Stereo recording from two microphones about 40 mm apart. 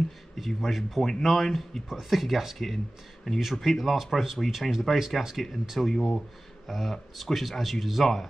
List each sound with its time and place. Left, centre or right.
0.6 s speech: centre
3.3 s speech: centre
3.6 s speech: centre